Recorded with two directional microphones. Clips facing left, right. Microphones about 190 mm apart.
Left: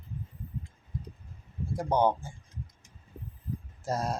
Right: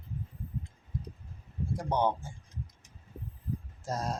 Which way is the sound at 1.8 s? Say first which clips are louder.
Left 4 dB; 10° left (ahead or behind).